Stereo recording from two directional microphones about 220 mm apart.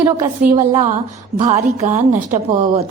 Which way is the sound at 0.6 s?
10° right (ahead or behind).